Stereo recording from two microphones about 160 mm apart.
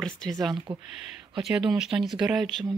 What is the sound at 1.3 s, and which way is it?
Speech, 5° right (ahead or behind).